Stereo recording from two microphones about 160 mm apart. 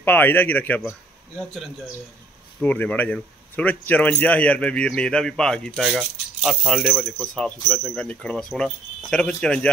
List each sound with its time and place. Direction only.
0.0 s a man's voice: 10° left (ahead or behind)